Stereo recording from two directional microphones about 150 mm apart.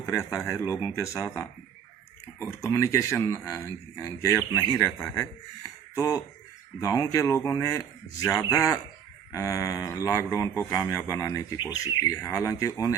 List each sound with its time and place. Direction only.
0.2 s speech: centre (ahead or behind)
0.4 s speech: 20° left (ahead or behind)
2.6 s speech: 20° left (ahead or behind)
4.9 s speech: 5° left (ahead or behind)
5.9 s speech: 25° left (ahead or behind)